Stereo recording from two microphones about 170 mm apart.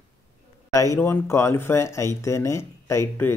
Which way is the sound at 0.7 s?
20° left (ahead or behind).